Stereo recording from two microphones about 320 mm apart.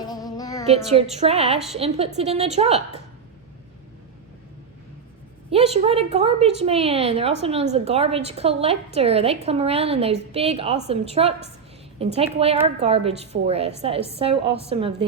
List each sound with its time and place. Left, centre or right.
0.0 s music: centre
1.1 s a woman's voice: centre
5.5 s a woman's voice: centre